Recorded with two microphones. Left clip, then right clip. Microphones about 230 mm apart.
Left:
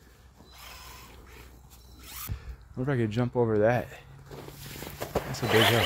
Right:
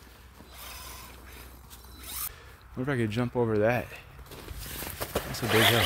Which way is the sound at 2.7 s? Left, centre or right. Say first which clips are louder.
Even; centre.